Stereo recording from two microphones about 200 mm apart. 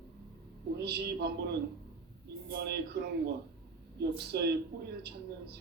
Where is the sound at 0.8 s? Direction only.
55° right (ahead or behind).